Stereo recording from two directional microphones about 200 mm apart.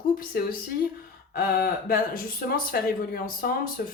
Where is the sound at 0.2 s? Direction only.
45° left (ahead or behind).